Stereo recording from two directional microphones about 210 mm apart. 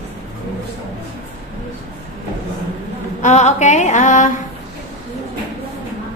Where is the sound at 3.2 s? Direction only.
35° left (ahead or behind).